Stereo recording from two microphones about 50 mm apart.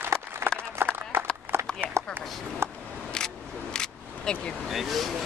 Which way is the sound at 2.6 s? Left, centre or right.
Right.